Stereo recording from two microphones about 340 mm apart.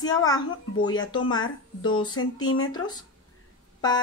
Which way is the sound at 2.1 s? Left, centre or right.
Left.